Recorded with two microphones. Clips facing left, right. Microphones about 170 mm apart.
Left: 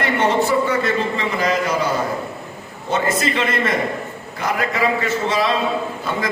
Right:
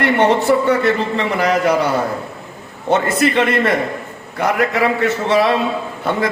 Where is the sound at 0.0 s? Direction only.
65° right (ahead or behind).